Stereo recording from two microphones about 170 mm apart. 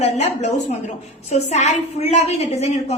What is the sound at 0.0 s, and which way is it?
A woman's voice, 40° left (ahead or behind).